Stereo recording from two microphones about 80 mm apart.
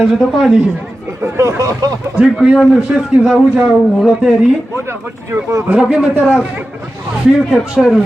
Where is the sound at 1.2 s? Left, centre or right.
Right.